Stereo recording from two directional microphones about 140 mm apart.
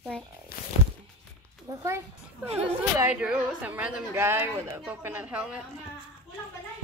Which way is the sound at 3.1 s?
10° right (ahead or behind).